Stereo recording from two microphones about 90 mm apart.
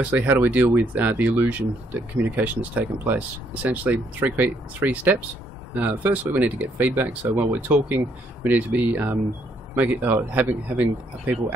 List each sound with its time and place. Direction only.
0.2 s speech: 20° right (ahead or behind)